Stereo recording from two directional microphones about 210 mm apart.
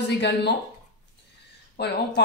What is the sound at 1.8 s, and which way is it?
Speech, 50° left (ahead or behind).